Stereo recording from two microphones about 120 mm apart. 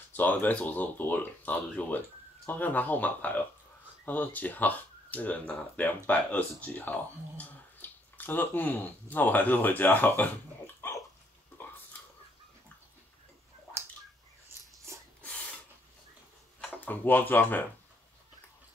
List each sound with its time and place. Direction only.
0.1 s speech: 15° left (ahead or behind)
10.8 s dog: 20° left (ahead or behind)
14.9 s rub: 25° right (ahead or behind)
16.7 s speech: 15° left (ahead or behind)